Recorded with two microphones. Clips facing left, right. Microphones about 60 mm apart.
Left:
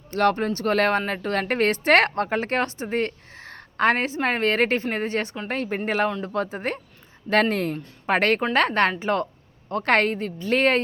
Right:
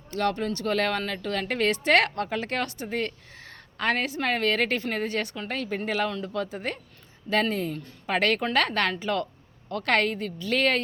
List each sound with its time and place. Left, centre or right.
0.1 s a woman's voice: left
7.5 s a woman's voice: left